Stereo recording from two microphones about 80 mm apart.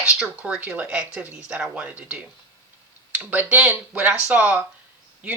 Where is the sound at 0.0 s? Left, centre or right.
Centre.